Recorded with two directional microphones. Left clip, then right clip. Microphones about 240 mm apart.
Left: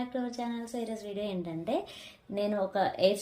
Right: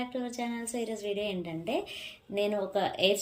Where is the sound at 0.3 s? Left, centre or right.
Left.